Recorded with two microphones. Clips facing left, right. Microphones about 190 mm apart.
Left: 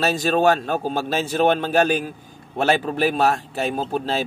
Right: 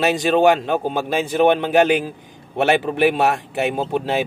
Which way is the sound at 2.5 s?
65° right (ahead or behind).